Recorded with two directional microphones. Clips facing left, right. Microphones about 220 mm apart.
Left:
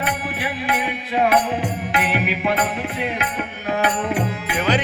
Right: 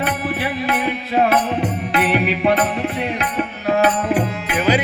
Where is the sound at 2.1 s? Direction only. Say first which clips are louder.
Right 6 dB; 35° right (ahead or behind).